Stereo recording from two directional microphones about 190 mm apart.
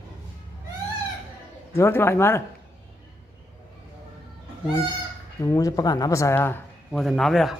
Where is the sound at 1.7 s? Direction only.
15° left (ahead or behind).